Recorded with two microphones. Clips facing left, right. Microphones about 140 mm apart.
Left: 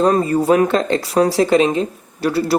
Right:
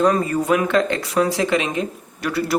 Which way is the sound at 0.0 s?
30° left (ahead or behind).